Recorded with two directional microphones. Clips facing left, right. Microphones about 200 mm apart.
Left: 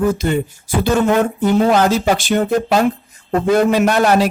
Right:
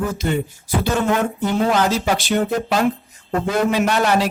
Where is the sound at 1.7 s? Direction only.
50° left (ahead or behind).